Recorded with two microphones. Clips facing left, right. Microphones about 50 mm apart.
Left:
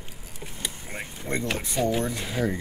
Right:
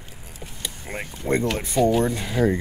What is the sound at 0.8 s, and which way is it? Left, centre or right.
Speech, right.